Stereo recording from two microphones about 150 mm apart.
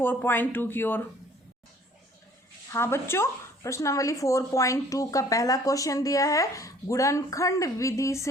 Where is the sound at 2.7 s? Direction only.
15° left (ahead or behind).